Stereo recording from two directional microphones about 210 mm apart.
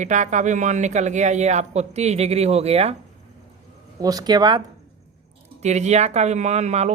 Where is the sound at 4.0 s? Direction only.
15° right (ahead or behind).